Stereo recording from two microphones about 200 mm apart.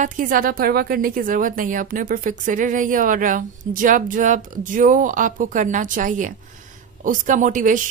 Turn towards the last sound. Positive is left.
turn(degrees=-40)  # may be behind; listen again after turning